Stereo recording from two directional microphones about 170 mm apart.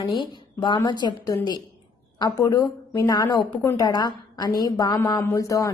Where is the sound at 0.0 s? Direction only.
25° left (ahead or behind).